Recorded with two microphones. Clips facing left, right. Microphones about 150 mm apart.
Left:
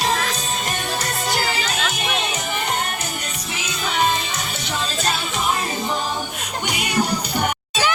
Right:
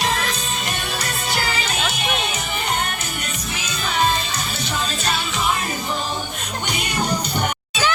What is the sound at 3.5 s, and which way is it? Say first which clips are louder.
Music: left 1 dB; 20° left (ahead or behind).